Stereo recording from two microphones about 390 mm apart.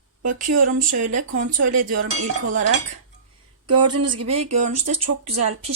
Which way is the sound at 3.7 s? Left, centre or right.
Right.